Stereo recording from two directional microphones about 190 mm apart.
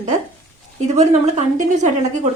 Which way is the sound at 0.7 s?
35° right (ahead or behind).